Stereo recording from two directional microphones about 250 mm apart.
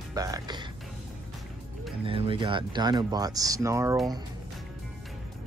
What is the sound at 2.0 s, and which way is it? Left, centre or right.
Speech, right.